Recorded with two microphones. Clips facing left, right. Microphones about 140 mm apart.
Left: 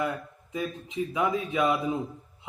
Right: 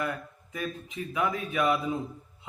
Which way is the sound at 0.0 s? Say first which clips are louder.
Left 2 dB; 20° left (ahead or behind).